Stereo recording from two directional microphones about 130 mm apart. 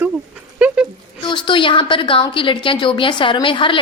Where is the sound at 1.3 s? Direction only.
40° left (ahead or behind).